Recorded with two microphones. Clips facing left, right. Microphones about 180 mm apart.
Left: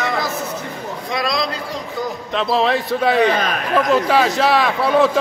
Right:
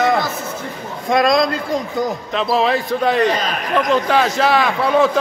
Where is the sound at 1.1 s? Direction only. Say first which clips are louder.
Right 8 dB; 50° right (ahead or behind).